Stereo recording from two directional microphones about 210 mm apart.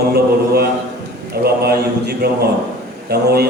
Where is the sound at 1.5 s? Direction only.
50° right (ahead or behind).